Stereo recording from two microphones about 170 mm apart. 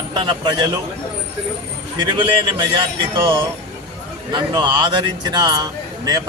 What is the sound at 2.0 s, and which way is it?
Speech, 30° right (ahead or behind).